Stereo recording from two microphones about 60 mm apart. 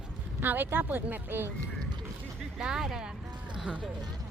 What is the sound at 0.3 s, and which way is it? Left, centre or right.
Speech, right.